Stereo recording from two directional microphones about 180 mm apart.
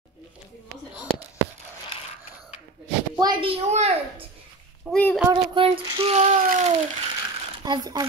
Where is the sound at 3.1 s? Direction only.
25° right (ahead or behind).